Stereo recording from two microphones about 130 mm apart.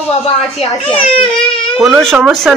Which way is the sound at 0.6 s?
45° left (ahead or behind).